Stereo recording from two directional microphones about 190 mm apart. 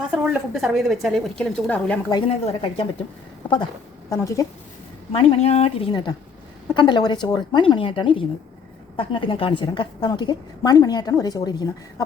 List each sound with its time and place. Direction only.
0.0 s a woman's voice: 5° right (ahead or behind)
2.0 s a woman's voice: 25° left (ahead or behind)
4.2 s a woman's voice: 15° left (ahead or behind)
5.4 s a woman's voice: 30° left (ahead or behind)